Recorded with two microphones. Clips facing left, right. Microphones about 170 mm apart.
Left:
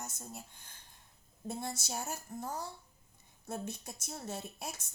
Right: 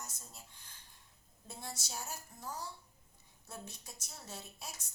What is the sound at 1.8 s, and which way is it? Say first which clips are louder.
Speech: left 5 dB; 50° left (ahead or behind).